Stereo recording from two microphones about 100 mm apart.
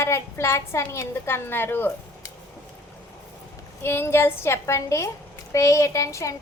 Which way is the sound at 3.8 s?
25° left (ahead or behind).